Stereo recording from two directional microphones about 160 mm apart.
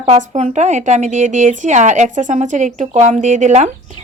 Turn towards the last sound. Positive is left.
turn(degrees=-45)  # may be behind; listen again after turning